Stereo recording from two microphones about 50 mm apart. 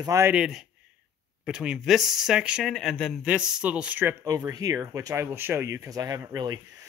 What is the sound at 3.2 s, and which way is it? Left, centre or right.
Speech, centre.